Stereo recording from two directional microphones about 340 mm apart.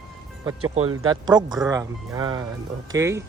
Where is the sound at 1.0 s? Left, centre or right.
Centre.